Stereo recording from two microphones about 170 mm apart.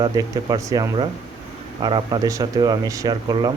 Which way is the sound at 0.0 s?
20° right (ahead or behind).